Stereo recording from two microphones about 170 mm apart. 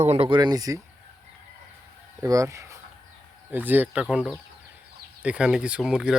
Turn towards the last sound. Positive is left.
turn(degrees=-5)  # may be behind; listen again after turning